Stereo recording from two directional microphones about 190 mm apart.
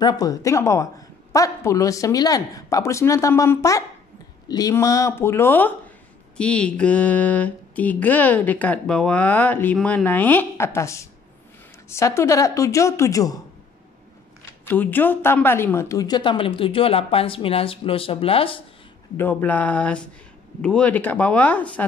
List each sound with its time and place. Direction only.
0.0 s mantra: 20° left (ahead or behind)
14.6 s a woman's voice: 10° left (ahead or behind); by 18.6 s 30° left (ahead or behind)
19.1 s mantra: 10° left (ahead or behind)